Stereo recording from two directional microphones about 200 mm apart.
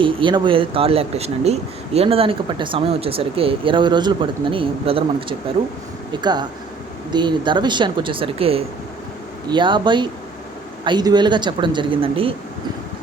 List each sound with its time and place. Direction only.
0.0 s speech: 25° right (ahead or behind)
7.1 s speech: 20° right (ahead or behind)